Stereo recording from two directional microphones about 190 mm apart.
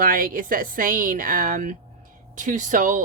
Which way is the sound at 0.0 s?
50° right (ahead or behind).